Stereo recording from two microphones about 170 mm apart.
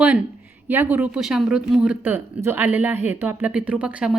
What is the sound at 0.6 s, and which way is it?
Speech, 10° right (ahead or behind).